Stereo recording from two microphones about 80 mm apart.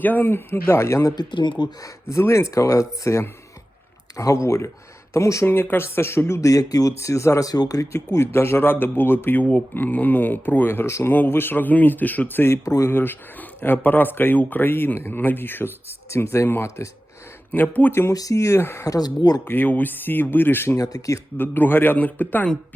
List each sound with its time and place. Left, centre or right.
0.0 s speech: left
1.1 s speech: left
1.8 s speech: left
7.9 s speech: left
12.6 s speech: left
12.9 s speech: left
17.5 s speech: left
18.1 s speech: left
18.9 s speech: left
19.5 s speech: left
20.7 s speech: left
21.3 s speech: left